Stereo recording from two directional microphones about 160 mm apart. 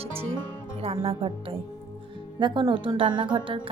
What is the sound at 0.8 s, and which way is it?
A woman's voice, 40° right (ahead or behind).